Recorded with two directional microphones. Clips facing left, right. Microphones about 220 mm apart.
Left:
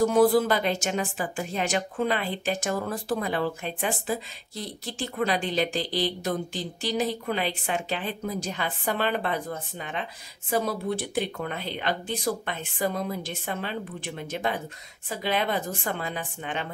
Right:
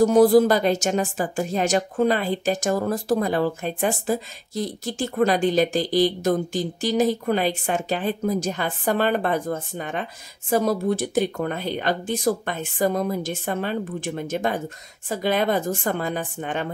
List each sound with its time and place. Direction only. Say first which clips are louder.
0.0 s speech: right 5 dB; 40° right (ahead or behind)